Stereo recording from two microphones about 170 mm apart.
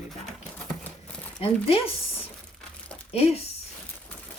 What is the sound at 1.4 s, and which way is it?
Speech, 35° left (ahead or behind).